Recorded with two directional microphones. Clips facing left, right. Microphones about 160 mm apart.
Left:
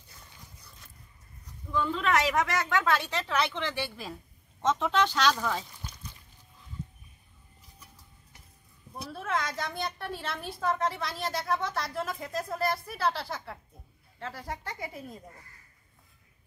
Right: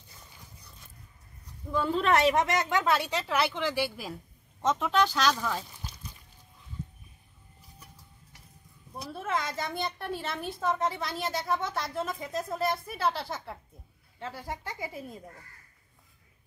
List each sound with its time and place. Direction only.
1.7 s a woman's voice: 40° right (ahead or behind); by 5.7 s centre (ahead or behind)
9.1 s a woman's voice: centre (ahead or behind)